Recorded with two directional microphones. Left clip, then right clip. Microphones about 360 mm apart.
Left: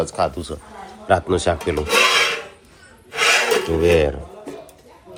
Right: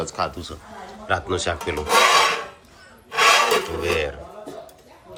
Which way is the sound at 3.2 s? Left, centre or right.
Right.